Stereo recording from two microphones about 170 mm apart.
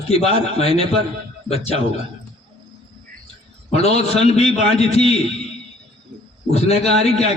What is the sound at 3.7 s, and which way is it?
A man's voice, 40° left (ahead or behind).